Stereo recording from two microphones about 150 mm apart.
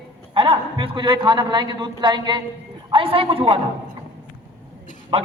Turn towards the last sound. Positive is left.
turn(degrees=-40)  # may be behind; listen again after turning